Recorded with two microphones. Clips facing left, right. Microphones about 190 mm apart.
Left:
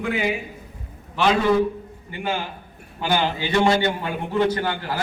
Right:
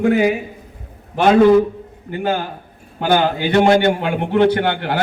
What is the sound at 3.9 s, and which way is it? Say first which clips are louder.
A man's voice: right 6 dB; 70° right (ahead or behind).